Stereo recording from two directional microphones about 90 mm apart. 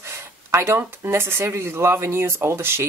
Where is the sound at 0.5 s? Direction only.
30° right (ahead or behind).